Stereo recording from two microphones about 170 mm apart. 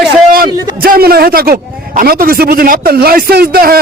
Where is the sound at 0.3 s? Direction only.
60° right (ahead or behind).